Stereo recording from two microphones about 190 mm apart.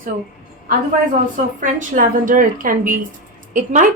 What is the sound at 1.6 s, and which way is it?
A woman's voice, 45° right (ahead or behind).